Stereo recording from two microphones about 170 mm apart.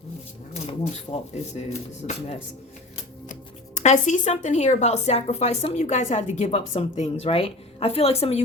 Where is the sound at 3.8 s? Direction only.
45° left (ahead or behind).